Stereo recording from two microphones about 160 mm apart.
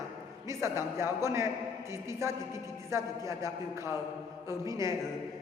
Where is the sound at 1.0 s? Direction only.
15° right (ahead or behind).